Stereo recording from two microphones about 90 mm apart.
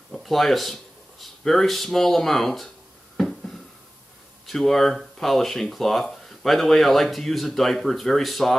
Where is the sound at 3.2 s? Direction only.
5° left (ahead or behind).